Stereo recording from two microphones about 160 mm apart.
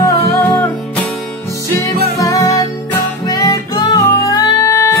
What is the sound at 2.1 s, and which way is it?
Music, 20° left (ahead or behind).